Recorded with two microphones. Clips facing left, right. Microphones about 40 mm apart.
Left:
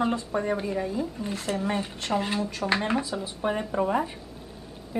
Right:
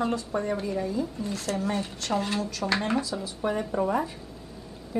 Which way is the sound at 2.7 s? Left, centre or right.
Centre.